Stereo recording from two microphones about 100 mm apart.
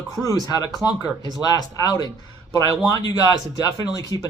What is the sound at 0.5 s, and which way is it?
Speech, 40° left (ahead or behind).